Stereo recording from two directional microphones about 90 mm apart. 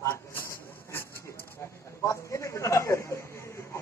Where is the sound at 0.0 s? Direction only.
30° left (ahead or behind).